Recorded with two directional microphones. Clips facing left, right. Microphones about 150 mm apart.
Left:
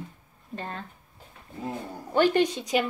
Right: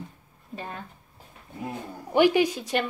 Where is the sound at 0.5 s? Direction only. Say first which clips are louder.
Left 1 dB; 5° right (ahead or behind).